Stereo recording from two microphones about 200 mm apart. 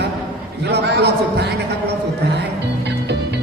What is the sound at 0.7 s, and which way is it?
Speech, 55° right (ahead or behind).